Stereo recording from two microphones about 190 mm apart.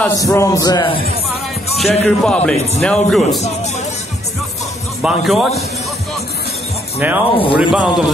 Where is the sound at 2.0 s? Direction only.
5° left (ahead or behind).